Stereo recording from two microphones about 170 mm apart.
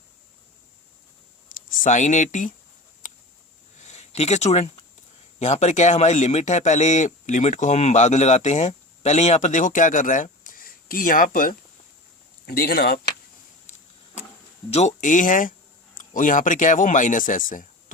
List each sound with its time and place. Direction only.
1.8 s speech: 45° left (ahead or behind)
3.8 s a sound: 40° left (ahead or behind)
5.4 s speech: 45° left (ahead or behind)
12.5 s speech: 65° left (ahead or behind)
14.7 s speech: 40° left (ahead or behind)